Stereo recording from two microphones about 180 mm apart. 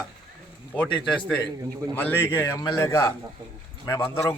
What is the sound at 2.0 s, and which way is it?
Speech, 10° left (ahead or behind).